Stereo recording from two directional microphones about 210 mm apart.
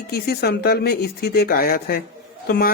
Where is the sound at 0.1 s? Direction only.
50° left (ahead or behind).